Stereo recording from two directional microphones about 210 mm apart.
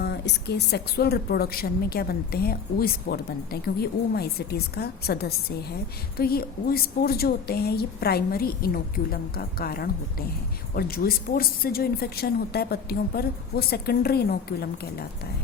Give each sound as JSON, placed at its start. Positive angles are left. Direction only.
{"t": 0.0, "sound": "a woman's voice", "side_deg": 50}